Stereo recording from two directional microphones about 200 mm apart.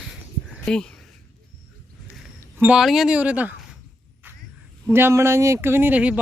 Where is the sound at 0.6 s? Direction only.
5° left (ahead or behind).